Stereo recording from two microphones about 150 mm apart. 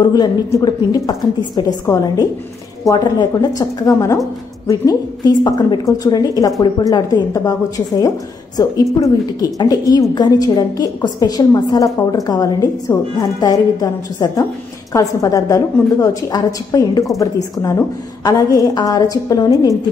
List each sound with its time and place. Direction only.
0.0 s a woman's voice: 25° left (ahead or behind)